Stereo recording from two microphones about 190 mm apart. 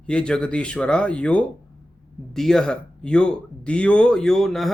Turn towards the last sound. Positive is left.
turn(degrees=0)  # may be behind; listen again after turning